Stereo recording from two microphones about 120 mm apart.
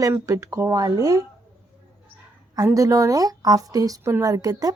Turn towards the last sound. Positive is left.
turn(degrees=-30)  # may be behind; listen again after turning